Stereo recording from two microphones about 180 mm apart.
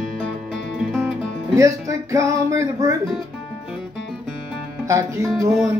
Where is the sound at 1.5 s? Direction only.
15° right (ahead or behind).